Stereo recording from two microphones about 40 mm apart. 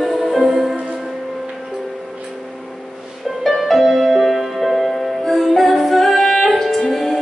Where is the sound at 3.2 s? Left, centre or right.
Centre.